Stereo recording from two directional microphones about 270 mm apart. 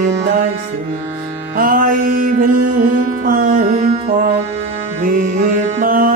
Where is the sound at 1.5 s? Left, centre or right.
Right.